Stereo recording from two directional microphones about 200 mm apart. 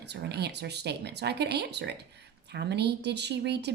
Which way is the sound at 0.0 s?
55° right (ahead or behind).